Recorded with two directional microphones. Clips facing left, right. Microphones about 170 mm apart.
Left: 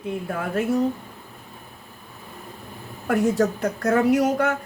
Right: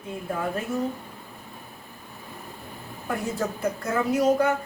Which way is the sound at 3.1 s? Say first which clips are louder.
Left 8 dB; 75° left (ahead or behind).